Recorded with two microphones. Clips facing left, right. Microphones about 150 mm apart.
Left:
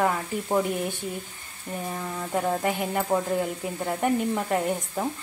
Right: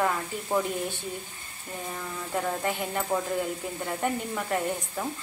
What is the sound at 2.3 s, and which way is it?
Speech, 15° left (ahead or behind).